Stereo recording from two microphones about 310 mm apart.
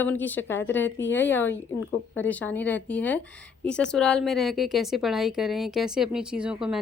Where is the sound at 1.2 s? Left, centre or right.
Centre.